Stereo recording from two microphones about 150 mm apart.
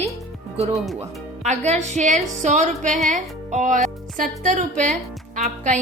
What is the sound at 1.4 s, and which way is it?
Speech, 45° right (ahead or behind).